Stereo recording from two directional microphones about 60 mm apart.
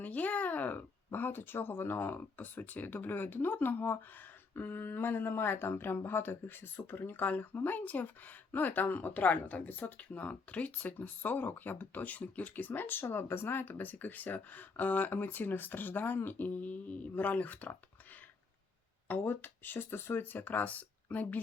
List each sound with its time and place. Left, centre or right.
0.0 s speech: left
19.2 s speech: left